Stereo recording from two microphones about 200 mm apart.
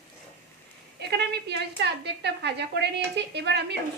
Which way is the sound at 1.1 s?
55° right (ahead or behind).